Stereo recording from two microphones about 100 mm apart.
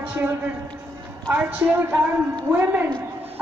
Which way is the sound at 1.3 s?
15° right (ahead or behind).